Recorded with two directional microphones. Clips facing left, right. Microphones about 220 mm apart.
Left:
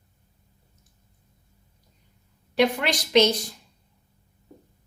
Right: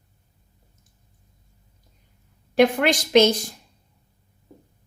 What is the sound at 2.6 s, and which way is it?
Speech, 50° right (ahead or behind).